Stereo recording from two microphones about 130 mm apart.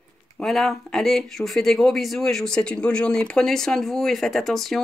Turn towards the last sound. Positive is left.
turn(degrees=0)  # may be behind; listen again after turning